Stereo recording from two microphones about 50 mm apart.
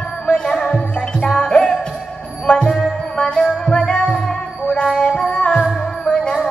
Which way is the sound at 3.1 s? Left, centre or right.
Centre.